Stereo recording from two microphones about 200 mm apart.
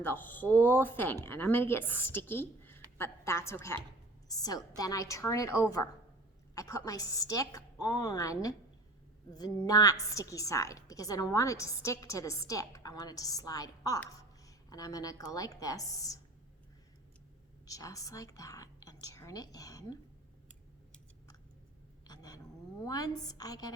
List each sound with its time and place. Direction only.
0.0 s a woman's voice: 10° left (ahead or behind)
17.7 s a woman's voice: 15° left (ahead or behind)
22.0 s a sound: 20° left (ahead or behind)
22.9 s a woman's voice: 20° left (ahead or behind)